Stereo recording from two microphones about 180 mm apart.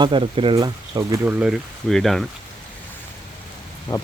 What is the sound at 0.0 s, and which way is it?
Speech, 30° right (ahead or behind).